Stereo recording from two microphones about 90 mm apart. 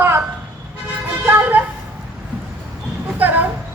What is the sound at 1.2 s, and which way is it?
Music, 20° right (ahead or behind).